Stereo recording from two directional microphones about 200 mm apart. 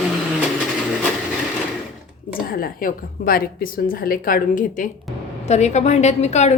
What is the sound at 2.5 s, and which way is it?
A woman's voice, 45° left (ahead or behind).